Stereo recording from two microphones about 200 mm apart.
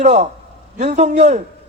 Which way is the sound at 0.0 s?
35° right (ahead or behind).